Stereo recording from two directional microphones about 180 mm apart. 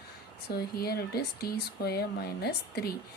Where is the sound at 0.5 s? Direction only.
60° left (ahead or behind).